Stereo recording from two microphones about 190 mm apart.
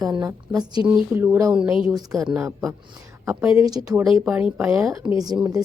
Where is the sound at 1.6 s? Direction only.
5° right (ahead or behind).